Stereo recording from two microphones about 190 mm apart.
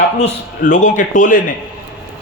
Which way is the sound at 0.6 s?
40° left (ahead or behind).